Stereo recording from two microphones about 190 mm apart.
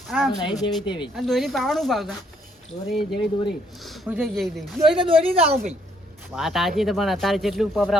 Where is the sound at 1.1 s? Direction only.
Centre (ahead or behind).